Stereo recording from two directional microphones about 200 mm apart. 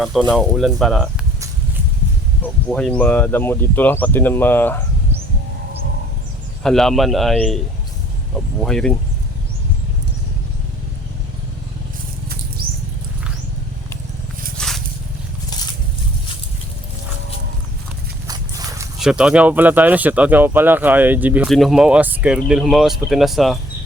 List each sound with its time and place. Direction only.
0.0 s speech: centre (ahead or behind)
2.4 s speech: 5° left (ahead or behind)
6.6 s speech: centre (ahead or behind)
8.6 s speech: 5° left (ahead or behind)
12.6 s patter: 50° right (ahead or behind)
14.6 s a sound: 5° left (ahead or behind)
18.3 s scrape: 15° right (ahead or behind)
18.9 s speech: 5° right (ahead or behind)